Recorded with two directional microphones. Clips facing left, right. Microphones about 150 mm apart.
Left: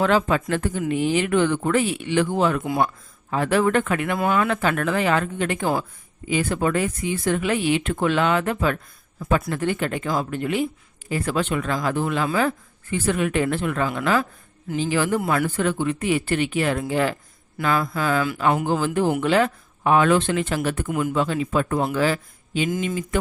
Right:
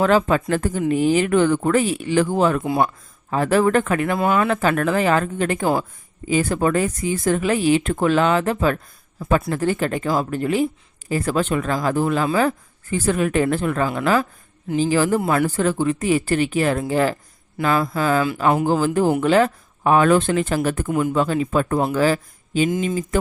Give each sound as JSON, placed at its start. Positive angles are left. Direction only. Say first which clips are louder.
{"t": 0.0, "sound": "speech", "louder": "right 3 dB", "side_deg": -40}
{"t": 15.2, "sound": "speech", "louder": "right 3 dB", "side_deg": -25}
{"t": 15.4, "sound": "speech", "louder": "right 3 dB", "side_deg": -40}